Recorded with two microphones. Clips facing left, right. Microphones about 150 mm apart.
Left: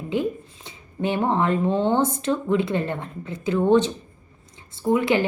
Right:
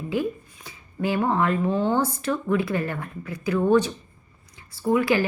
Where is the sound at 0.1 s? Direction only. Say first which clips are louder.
Left 2 dB; 20° left (ahead or behind).